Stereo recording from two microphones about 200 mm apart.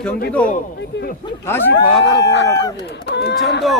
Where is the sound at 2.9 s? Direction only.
60° left (ahead or behind).